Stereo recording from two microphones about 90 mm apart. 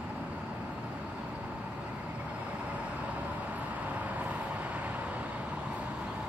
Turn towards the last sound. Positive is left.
turn(degrees=-15)  # may be behind; listen again after turning